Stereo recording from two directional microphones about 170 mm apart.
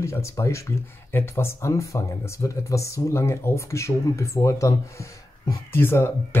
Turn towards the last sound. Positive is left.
turn(degrees=15)  # may be behind; listen again after turning